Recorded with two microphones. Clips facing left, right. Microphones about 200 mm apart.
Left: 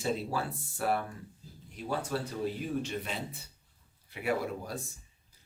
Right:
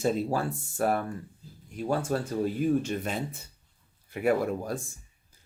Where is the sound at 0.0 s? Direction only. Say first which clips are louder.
Right 6 dB; 45° right (ahead or behind).